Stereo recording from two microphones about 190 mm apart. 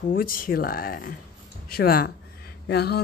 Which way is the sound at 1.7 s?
50° left (ahead or behind).